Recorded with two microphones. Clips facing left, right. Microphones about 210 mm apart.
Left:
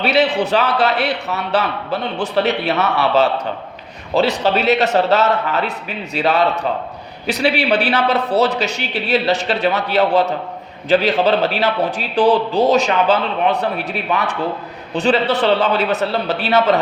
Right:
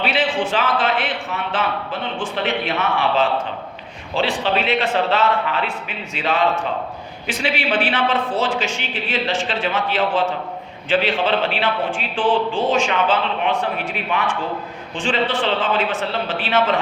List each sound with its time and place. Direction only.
0.0 s a man's voice: 40° left (ahead or behind)
4.1 s a man's voice: 40° left (ahead or behind)